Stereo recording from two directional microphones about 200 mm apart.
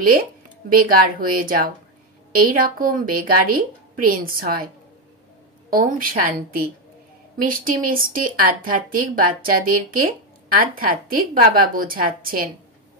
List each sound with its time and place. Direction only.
0.0 s speech: 45° right (ahead or behind)
5.7 s speech: 45° right (ahead or behind)